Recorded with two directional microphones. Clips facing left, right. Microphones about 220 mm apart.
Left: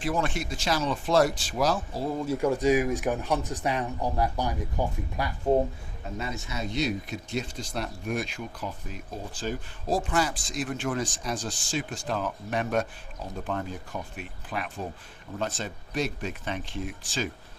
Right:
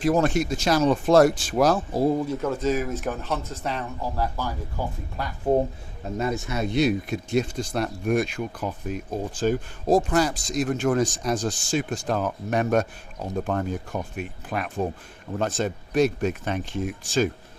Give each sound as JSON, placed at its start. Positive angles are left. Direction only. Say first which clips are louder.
{"t": 0.0, "sound": "speech", "louder": "right 8 dB", "side_deg": -40}
{"t": 2.2, "sound": "speech", "louder": "left 1 dB", "side_deg": 10}
{"t": 6.1, "sound": "speech", "louder": "right 8 dB", "side_deg": -50}